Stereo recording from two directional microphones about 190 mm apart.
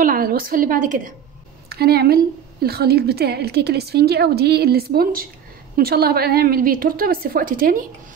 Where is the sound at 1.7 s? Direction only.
55° right (ahead or behind).